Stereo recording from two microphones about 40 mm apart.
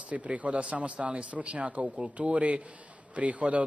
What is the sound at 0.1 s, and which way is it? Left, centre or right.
A man's voice, right.